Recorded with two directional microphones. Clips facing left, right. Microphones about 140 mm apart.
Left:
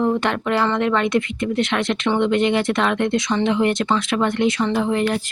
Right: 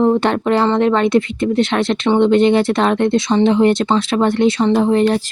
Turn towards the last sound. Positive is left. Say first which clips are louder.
# right 6 dB
turn(degrees=-35)  # may be behind; listen again after turning